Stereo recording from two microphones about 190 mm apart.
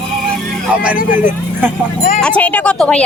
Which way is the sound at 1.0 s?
45° left (ahead or behind).